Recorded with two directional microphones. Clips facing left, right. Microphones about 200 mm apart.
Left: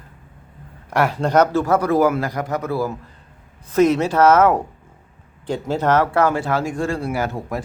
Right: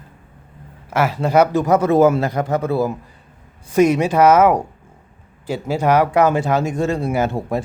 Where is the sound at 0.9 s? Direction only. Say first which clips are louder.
Right 1 dB; centre (ahead or behind); by 2.9 s 25° right (ahead or behind).